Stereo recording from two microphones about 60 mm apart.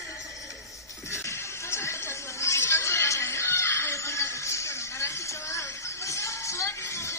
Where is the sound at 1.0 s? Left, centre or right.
Left.